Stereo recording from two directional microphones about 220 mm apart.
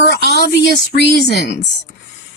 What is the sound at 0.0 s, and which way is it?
Speech, 50° left (ahead or behind).